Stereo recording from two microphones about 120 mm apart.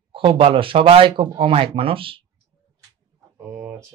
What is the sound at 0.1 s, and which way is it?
Speech, 45° right (ahead or behind).